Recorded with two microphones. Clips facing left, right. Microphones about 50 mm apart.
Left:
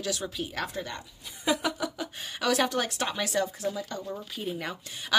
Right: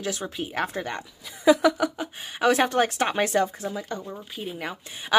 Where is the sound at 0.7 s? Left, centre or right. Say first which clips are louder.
Right 5 dB; right.